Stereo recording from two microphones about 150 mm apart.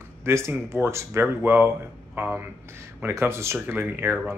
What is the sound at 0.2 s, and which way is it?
Speech, 15° right (ahead or behind).